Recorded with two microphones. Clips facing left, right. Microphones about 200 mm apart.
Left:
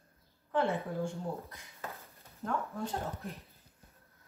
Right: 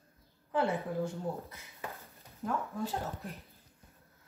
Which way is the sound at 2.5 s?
Centre (ahead or behind).